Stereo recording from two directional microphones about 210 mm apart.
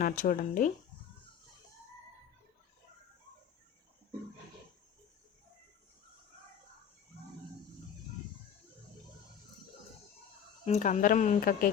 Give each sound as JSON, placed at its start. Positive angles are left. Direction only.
{"t": 0.0, "sound": "speech", "side_deg": 40}
{"t": 10.7, "sound": "speech", "side_deg": 35}